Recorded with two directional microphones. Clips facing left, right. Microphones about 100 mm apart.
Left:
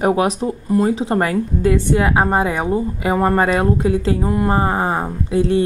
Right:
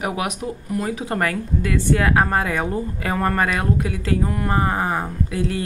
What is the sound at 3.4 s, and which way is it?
Speech, 30° left (ahead or behind).